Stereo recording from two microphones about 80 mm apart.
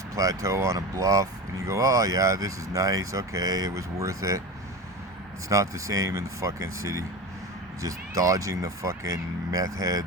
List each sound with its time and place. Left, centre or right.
0.1 s speech: right
5.5 s speech: right